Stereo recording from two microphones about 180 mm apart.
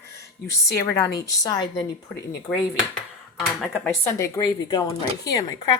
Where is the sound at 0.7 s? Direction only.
15° left (ahead or behind).